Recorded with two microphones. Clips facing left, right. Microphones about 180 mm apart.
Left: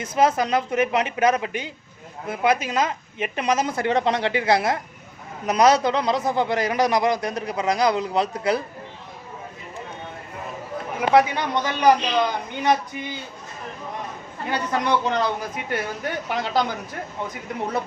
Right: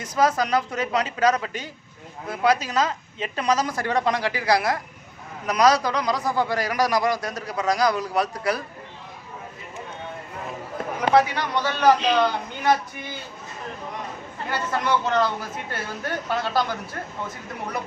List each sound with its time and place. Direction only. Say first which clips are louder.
0.0 s a man's voice: left 2 dB; 25° left (ahead or behind)
11.1 s speech: left 2 dB; 20° left (ahead or behind)
14.5 s speech: left 2 dB; 15° left (ahead or behind)